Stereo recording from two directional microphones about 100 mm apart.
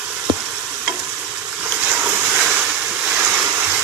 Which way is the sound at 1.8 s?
15° right (ahead or behind).